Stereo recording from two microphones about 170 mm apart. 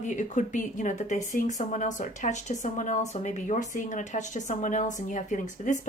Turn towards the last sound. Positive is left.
turn(degrees=45)  # may be behind; listen again after turning